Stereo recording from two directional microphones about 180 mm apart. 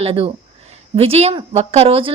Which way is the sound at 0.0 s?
30° right (ahead or behind).